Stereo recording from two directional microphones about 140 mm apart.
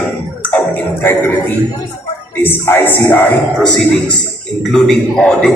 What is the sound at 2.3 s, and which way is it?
Speech, 15° left (ahead or behind).